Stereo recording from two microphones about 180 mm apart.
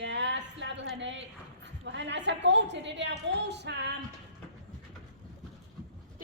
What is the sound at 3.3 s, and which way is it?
Female singing, 70° right (ahead or behind).